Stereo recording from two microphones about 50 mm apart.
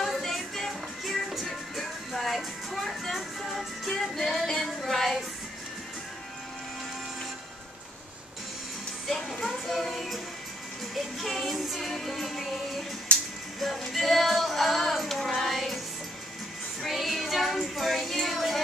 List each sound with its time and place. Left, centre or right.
0.0 s music: centre
4.6 s a sound: centre
9.0 s music: centre
11.2 s music: centre
13.1 s music: left
13.6 s music: centre
16.8 s child singing: centre